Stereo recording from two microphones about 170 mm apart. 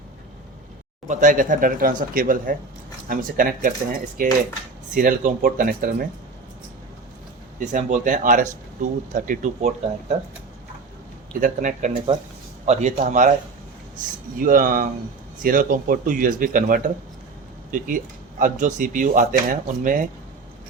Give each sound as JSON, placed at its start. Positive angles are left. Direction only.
{"t": 1.0, "sound": "speech", "side_deg": -45}
{"t": 7.6, "sound": "speech", "side_deg": -45}
{"t": 11.3, "sound": "speech", "side_deg": -50}
{"t": 14.3, "sound": "speech", "side_deg": -55}